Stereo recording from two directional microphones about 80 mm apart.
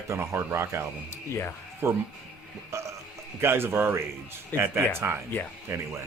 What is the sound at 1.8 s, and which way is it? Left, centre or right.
Speech, right.